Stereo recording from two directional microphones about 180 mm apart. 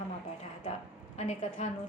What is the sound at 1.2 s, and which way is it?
Speech, 40° left (ahead or behind).